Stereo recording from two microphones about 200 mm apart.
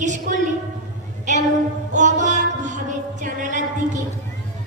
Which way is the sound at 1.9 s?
35° right (ahead or behind).